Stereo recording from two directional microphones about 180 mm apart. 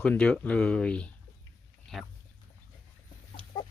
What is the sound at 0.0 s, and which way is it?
Speech, 5° left (ahead or behind).